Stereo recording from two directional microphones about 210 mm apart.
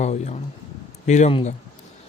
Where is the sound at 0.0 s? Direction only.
35° left (ahead or behind).